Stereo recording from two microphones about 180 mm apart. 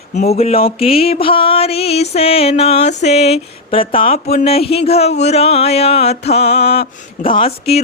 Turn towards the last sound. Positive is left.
turn(degrees=30)  # may be behind; listen again after turning